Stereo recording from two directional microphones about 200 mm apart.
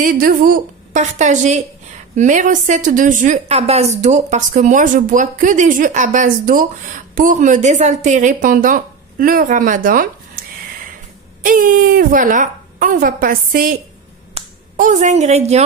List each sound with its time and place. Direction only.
0.0 s a woman's voice: 45° right (ahead or behind)